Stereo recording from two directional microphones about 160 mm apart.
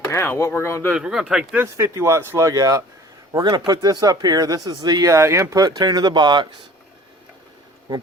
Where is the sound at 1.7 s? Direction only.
15° right (ahead or behind).